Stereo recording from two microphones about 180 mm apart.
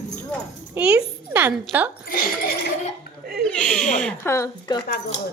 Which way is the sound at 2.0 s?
55° left (ahead or behind).